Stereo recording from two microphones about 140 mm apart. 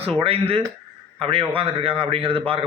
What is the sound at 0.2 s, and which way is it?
A man's voice, 45° right (ahead or behind).